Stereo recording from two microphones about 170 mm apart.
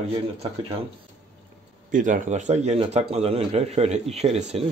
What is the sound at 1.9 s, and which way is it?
Speech, 50° right (ahead or behind).